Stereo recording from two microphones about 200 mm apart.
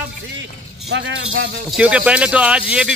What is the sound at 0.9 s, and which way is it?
Speech, 65° right (ahead or behind).